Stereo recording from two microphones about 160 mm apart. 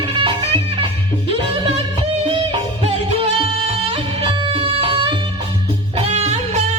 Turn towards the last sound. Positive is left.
turn(degrees=-40)  # may be behind; listen again after turning